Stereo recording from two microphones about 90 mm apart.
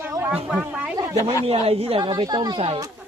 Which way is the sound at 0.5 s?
15° right (ahead or behind).